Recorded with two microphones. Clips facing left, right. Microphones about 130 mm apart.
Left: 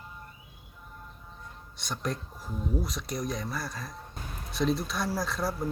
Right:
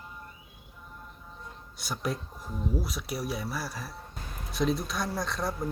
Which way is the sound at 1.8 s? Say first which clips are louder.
Right 1 dB; 5° right (ahead or behind).